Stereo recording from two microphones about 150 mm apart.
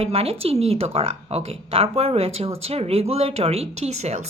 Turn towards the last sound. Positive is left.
turn(degrees=-45)  # may be behind; listen again after turning